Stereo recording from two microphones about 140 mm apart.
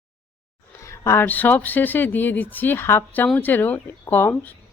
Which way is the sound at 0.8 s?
20° left (ahead or behind).